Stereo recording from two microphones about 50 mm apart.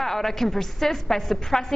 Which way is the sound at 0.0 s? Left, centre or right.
Centre.